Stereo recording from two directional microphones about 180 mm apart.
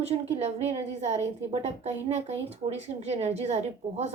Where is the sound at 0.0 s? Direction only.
35° right (ahead or behind).